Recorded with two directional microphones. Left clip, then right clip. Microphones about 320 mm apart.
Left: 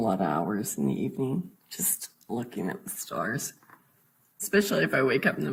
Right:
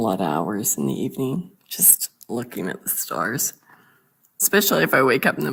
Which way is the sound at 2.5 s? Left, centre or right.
Right.